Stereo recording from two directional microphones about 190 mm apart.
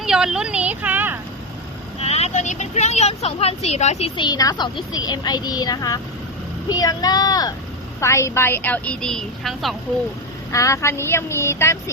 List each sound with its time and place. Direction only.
0.0 s speech: centre (ahead or behind)
2.0 s a woman's voice: 35° left (ahead or behind); by 9.7 s centre (ahead or behind)
10.5 s a woman's voice: 15° left (ahead or behind)